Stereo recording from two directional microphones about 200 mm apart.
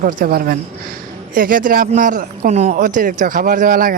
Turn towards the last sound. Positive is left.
turn(degrees=-45)  # may be behind; listen again after turning